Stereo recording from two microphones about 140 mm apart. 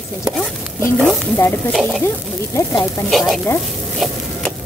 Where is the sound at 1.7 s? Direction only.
Centre (ahead or behind).